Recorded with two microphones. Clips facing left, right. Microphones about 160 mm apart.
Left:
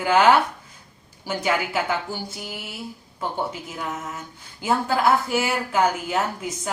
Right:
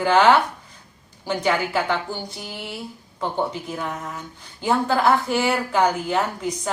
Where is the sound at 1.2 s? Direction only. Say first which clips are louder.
Right 2 dB; 5° left (ahead or behind).